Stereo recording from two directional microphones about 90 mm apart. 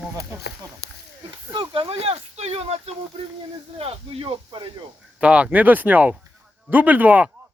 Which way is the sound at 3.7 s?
90° right.